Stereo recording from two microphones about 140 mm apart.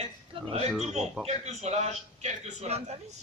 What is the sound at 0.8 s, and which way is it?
A man's voice, 50° right (ahead or behind).